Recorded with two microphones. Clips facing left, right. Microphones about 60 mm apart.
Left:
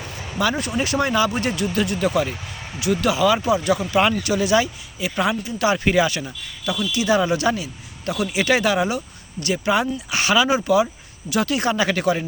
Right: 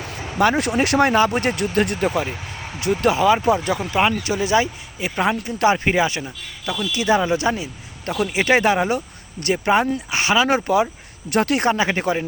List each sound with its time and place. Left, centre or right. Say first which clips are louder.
0.5 s speech: right 4 dB; right
2.0 s speech: left 1 dB; right
3.7 s speech: left 1 dB; right
5.7 s speech: even; right
6.9 s speech: right 1 dB; right
10.1 s speech: left 1 dB; right
11.3 s speech: right 3 dB; right
11.7 s speech: even; right